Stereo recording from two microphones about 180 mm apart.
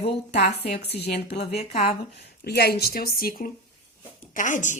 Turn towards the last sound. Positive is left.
turn(degrees=45)  # may be behind; listen again after turning